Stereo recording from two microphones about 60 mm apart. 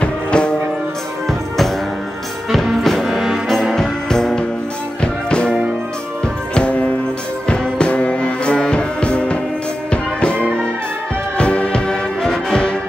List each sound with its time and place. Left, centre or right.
0.0 s music: centre
2.5 s music: centre
3.7 s music: centre